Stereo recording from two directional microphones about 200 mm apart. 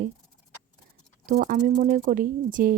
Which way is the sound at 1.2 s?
40° right (ahead or behind).